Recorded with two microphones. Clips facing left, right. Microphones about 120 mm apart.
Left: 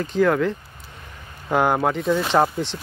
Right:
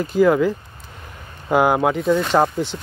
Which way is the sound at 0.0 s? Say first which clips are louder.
Right 3 dB; 5° right (ahead or behind).